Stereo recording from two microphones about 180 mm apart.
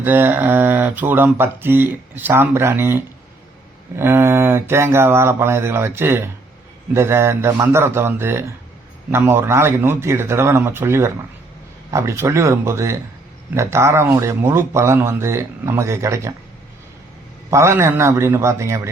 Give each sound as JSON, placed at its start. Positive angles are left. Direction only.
{"t": 0.0, "sound": "speech", "side_deg": -10}
{"t": 17.5, "sound": "speech", "side_deg": -15}